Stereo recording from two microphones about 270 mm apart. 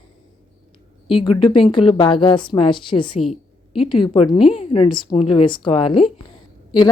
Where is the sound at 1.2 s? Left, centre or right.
Centre.